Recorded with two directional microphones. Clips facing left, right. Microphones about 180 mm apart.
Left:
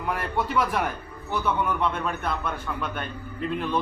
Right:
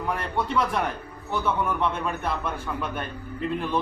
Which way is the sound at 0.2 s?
5° left (ahead or behind).